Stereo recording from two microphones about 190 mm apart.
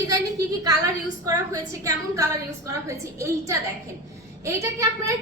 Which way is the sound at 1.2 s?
20° right (ahead or behind).